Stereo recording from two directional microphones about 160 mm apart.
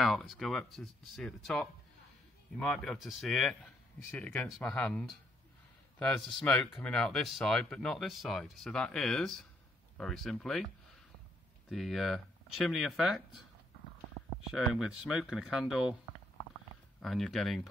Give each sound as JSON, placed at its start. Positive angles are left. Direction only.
{"t": 0.0, "sound": "speech", "side_deg": 0}
{"t": 11.7, "sound": "speech", "side_deg": 0}
{"t": 14.5, "sound": "speech", "side_deg": 0}
{"t": 17.0, "sound": "speech", "side_deg": 0}